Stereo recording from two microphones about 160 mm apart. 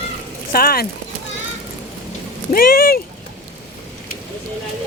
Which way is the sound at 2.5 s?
65° left (ahead or behind).